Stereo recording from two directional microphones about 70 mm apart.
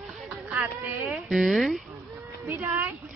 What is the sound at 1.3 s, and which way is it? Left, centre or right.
Speech, centre.